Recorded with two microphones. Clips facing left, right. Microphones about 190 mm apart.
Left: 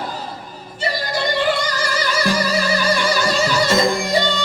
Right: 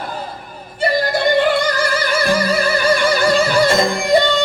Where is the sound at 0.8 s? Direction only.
55° right (ahead or behind).